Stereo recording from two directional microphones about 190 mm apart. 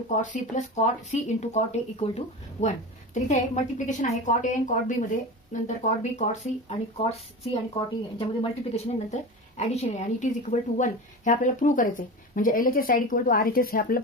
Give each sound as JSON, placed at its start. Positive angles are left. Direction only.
{"t": 0.1, "sound": "a woman's voice", "side_deg": 40}